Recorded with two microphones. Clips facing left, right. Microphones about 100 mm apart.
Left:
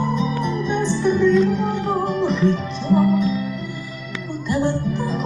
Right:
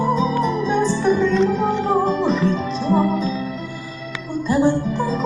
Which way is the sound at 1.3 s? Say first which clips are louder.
Even; 80° right.